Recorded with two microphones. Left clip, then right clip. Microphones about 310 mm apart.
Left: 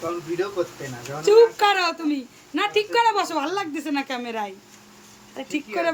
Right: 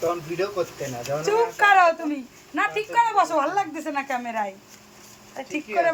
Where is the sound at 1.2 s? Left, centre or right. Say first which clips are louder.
Left 5 dB; centre.